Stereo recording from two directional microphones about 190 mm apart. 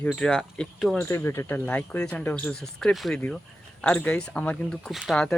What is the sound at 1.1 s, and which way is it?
Speech, 15° left (ahead or behind).